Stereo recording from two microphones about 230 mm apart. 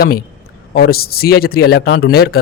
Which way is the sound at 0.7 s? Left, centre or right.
Left.